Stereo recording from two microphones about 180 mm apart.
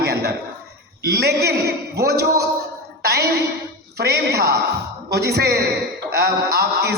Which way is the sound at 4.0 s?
65° right (ahead or behind).